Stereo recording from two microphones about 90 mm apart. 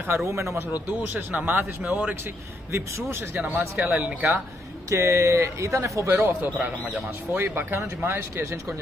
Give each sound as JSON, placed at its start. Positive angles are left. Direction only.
{"t": 0.3, "sound": "a man's voice", "side_deg": -30}
{"t": 1.0, "sound": "speech", "side_deg": -20}
{"t": 2.7, "sound": "speech", "side_deg": -30}
{"t": 3.3, "sound": "speech", "side_deg": -15}
{"t": 4.8, "sound": "a man's voice", "side_deg": -35}
{"t": 6.6, "sound": "speech", "side_deg": -10}
{"t": 7.3, "sound": "speech", "side_deg": -25}